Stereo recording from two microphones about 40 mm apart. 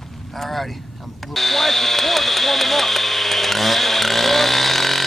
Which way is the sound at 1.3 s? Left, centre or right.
Centre.